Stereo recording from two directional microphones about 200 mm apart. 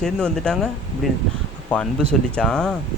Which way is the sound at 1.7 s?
5° left (ahead or behind).